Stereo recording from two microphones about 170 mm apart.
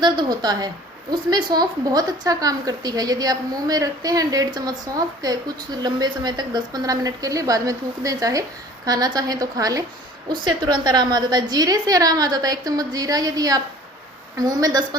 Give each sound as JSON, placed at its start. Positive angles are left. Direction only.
{"t": 0.0, "sound": "a woman's voice", "side_deg": -25}